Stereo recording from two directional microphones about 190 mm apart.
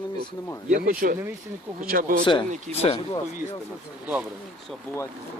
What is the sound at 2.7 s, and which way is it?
Speech, 35° right (ahead or behind).